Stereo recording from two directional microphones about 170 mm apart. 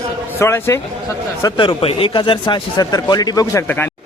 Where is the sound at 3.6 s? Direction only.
10° left (ahead or behind).